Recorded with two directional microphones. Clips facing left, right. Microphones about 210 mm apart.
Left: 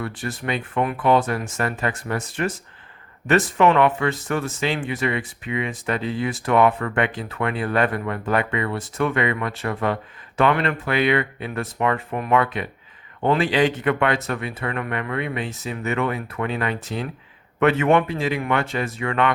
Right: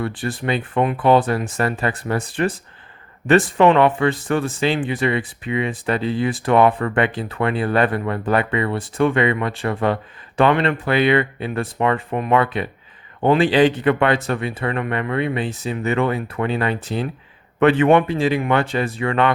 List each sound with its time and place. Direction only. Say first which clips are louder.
0.0 s speech: right 4 dB; 30° right (ahead or behind)